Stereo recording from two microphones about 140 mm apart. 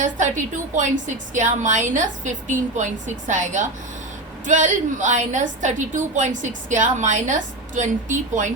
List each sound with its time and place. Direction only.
0.0 s a woman's voice: 60° right (ahead or behind)